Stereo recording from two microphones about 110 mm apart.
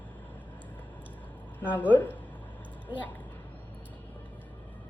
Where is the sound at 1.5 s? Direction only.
15° left (ahead or behind).